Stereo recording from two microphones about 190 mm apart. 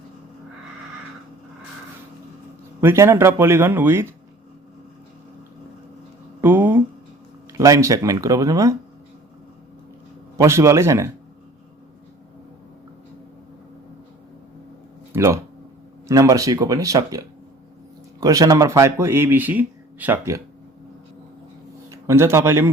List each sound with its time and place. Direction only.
2.8 s speech: 15° right (ahead or behind)
6.4 s a sound: 10° right (ahead or behind)
7.5 s speech: 15° right (ahead or behind)
10.3 s speech: 15° right (ahead or behind)
15.1 s a sound: 15° right (ahead or behind)
16.0 s speech: 15° right (ahead or behind)
18.2 s speech: 20° right (ahead or behind)
21.8 s a man's voice: 15° right (ahead or behind)